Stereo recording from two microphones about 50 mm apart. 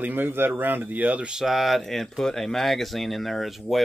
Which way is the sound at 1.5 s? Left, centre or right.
Centre.